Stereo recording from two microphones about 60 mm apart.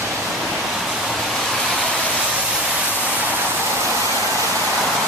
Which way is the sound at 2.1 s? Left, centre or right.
Centre.